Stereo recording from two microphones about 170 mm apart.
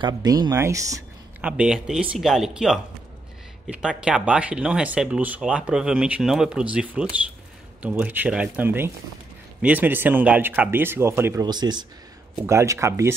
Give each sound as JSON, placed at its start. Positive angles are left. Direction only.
{"t": 0.0, "sound": "speech", "side_deg": -25}
{"t": 1.4, "sound": "speech", "side_deg": -5}